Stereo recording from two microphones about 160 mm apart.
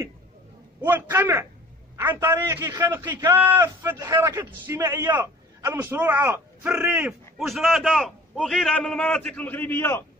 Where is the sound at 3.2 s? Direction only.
10° right (ahead or behind).